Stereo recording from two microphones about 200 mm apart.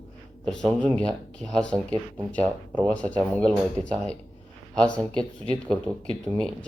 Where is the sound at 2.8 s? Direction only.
5° left (ahead or behind).